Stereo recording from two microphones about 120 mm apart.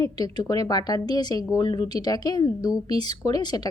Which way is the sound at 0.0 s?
35° left (ahead or behind).